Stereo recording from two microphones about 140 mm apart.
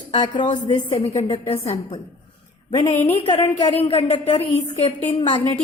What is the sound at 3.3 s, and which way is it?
A woman's voice, 35° left (ahead or behind).